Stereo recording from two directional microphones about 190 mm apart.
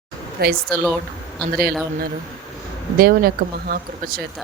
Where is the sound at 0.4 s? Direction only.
55° right (ahead or behind).